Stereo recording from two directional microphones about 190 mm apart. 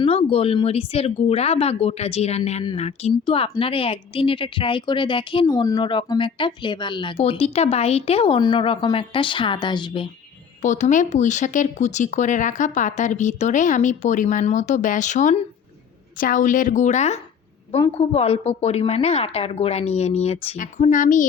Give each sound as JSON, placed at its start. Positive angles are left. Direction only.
{"t": 0.0, "sound": "speech", "side_deg": 30}
{"t": 10.6, "sound": "a woman's voice", "side_deg": 40}